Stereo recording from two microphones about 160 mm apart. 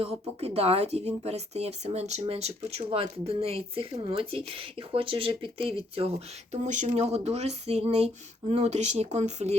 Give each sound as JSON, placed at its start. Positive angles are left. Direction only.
{"t": 0.0, "sound": "speech", "side_deg": -40}